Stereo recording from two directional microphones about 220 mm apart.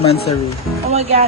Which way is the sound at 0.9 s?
30° right (ahead or behind).